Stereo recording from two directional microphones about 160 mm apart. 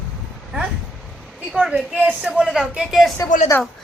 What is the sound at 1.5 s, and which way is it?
A woman's voice, 5° right (ahead or behind).